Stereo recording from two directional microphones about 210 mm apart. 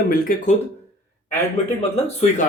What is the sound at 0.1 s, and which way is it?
Speech, 40° left (ahead or behind).